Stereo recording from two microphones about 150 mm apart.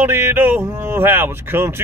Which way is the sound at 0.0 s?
15° right (ahead or behind).